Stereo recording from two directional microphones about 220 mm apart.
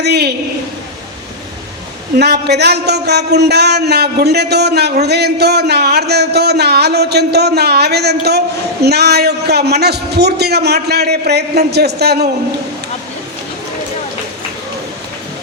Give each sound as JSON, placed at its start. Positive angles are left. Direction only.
{"t": 0.0, "sound": "a woman's voice", "side_deg": -50}
{"t": 2.1, "sound": "a man's voice", "side_deg": -50}